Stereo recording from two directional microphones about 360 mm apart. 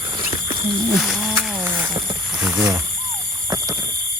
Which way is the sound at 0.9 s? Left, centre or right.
Centre.